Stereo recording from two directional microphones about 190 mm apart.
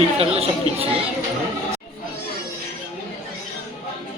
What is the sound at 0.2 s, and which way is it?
Speech, 30° right (ahead or behind).